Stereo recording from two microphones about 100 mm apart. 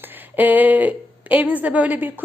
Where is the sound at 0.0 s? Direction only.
20° right (ahead or behind).